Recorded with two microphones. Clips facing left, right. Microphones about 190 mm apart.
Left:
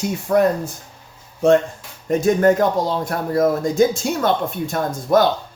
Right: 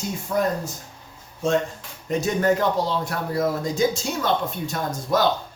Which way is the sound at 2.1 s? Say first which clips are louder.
Left 6 dB; 50° left (ahead or behind).